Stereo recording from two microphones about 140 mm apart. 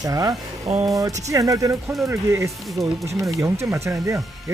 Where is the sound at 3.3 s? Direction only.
20° right (ahead or behind).